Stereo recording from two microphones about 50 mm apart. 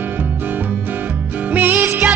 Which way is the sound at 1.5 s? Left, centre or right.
Right.